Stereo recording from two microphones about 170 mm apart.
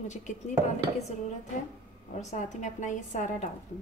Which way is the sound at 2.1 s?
45° left (ahead or behind).